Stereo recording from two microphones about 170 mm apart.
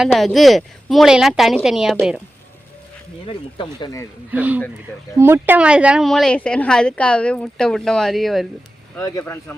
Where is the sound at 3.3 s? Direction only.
25° left (ahead or behind).